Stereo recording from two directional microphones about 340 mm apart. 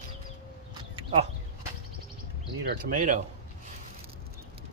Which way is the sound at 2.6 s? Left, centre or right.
Right.